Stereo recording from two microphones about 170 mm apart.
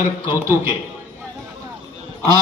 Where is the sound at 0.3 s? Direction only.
15° right (ahead or behind).